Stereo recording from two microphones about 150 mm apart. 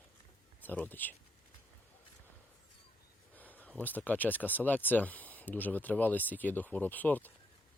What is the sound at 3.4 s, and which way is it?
Speech, 10° left (ahead or behind).